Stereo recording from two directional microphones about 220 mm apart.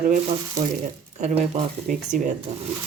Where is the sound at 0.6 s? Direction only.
15° right (ahead or behind).